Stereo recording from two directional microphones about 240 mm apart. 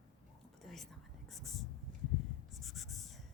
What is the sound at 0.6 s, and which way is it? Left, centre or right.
Whispering, centre.